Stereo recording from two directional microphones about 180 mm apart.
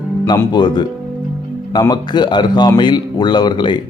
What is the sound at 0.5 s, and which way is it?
Speech, 25° left (ahead or behind).